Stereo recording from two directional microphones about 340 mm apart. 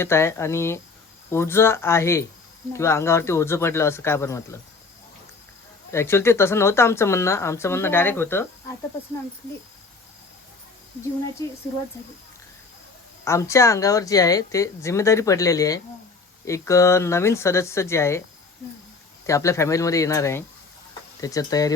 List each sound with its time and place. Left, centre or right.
0.0 s speech: centre
5.9 s speech: centre
11.4 s speech: centre
13.2 s speech: centre
19.2 s speech: centre